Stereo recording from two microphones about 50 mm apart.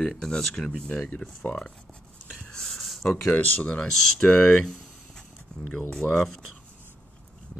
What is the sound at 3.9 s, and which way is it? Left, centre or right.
Speech, centre.